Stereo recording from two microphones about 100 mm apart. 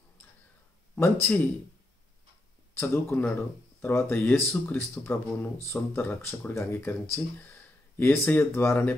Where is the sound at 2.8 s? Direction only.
20° left (ahead or behind).